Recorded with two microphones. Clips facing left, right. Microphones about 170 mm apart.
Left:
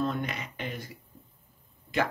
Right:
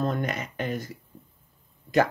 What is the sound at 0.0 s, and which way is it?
Speech, 45° right (ahead or behind).